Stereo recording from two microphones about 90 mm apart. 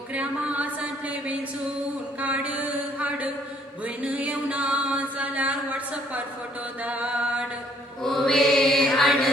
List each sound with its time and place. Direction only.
0.1 s music: 15° right (ahead or behind)
8.0 s mantra: 5° left (ahead or behind)